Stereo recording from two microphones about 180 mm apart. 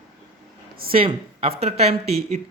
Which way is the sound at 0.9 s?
30° right (ahead or behind).